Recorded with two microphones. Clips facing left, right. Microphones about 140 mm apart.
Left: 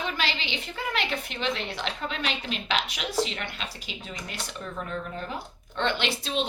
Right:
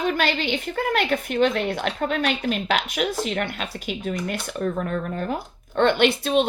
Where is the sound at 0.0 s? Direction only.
50° right (ahead or behind).